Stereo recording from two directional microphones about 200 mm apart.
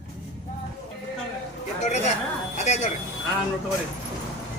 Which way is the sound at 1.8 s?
35° left (ahead or behind).